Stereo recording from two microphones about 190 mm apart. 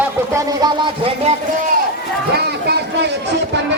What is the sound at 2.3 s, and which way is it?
Speech, 55° right (ahead or behind).